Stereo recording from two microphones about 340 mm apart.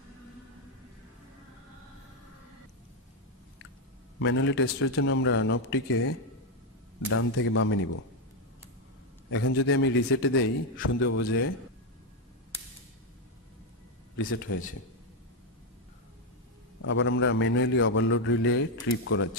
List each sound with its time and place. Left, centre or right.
4.2 s a man's voice: left
9.3 s a man's voice: left
16.8 s a man's voice: left